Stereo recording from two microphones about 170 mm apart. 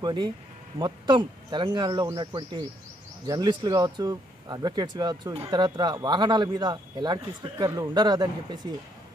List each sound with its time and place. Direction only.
0.0 s speech: 25° right (ahead or behind)